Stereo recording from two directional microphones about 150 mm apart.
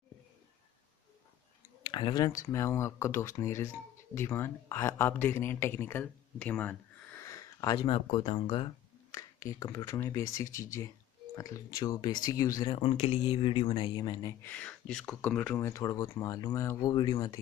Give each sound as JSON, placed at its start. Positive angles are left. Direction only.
{"t": 1.9, "sound": "speech", "side_deg": 30}
{"t": 7.9, "sound": "speech", "side_deg": 40}
{"t": 9.1, "sound": "speech", "side_deg": 20}
{"t": 12.7, "sound": "speech", "side_deg": 40}
{"t": 14.4, "sound": "speech", "side_deg": 10}